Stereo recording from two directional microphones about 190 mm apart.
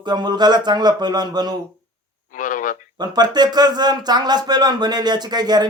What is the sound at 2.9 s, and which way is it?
Speech, 20° right (ahead or behind).